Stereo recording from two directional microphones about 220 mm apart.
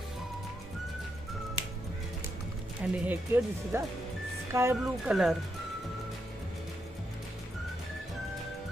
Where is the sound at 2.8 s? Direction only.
5° right (ahead or behind).